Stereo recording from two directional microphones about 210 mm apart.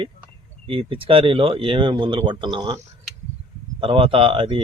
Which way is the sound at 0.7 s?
25° right (ahead or behind).